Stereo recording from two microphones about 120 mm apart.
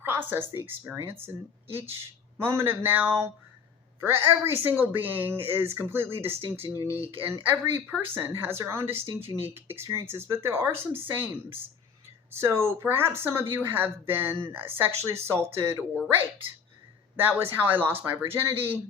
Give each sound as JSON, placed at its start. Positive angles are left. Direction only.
{"t": 0.0, "sound": "speech", "side_deg": -15}
{"t": 6.3, "sound": "speech", "side_deg": -55}
{"t": 6.9, "sound": "speech", "side_deg": -15}
{"t": 17.4, "sound": "speech", "side_deg": -15}